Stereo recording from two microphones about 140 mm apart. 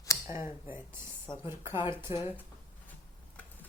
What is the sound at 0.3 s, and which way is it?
Speech, 20° right (ahead or behind).